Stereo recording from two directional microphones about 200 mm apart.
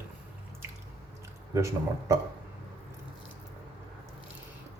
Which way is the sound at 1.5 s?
15° right (ahead or behind).